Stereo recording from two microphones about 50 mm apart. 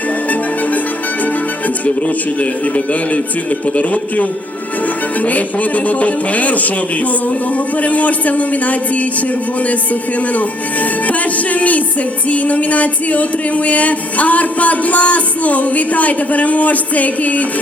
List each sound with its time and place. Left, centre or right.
1.8 s music: left
5.2 s speech: left
7.8 s music: left
9.6 s speech: left
11.0 s music: left